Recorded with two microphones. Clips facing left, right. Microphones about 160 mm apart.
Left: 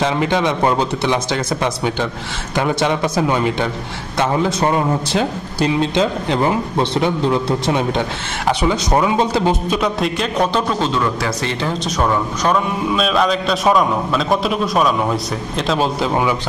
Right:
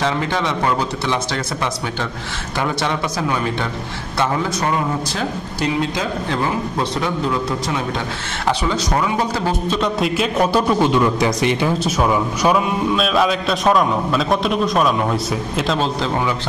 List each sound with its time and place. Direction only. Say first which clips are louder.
0.0 s a man's voice: left 3 dB; 20° left (ahead or behind)
9.8 s a man's voice: even; centre (ahead or behind)